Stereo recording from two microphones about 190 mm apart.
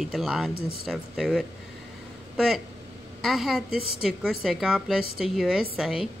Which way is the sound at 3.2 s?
Centre (ahead or behind).